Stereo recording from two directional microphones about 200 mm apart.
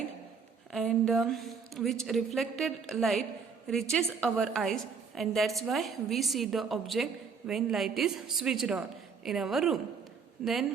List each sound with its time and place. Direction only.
0.7 s a woman's voice: centre (ahead or behind)